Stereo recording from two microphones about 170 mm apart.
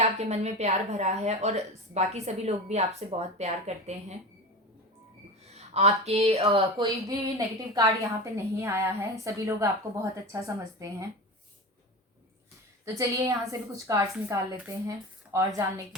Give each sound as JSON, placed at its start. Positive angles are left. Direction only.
{"t": 0.0, "sound": "a woman's voice", "side_deg": -40}
{"t": 5.5, "sound": "speech", "side_deg": -40}
{"t": 12.8, "sound": "a woman's voice", "side_deg": -20}